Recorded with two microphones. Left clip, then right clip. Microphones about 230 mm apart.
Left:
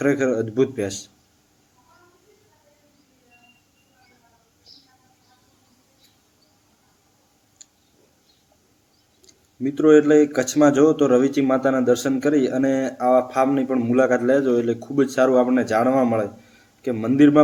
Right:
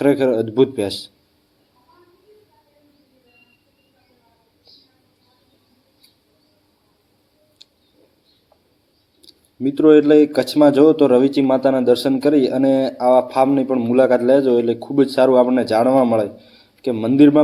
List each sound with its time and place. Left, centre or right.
0.1 s speech: centre
9.6 s speech: centre
11.2 s speech: centre
11.4 s a man's voice: centre